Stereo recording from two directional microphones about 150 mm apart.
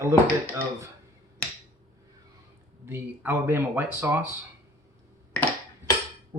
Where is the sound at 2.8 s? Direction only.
15° right (ahead or behind).